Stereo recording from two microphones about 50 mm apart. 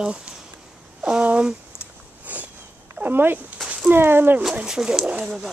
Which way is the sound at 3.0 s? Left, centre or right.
Right.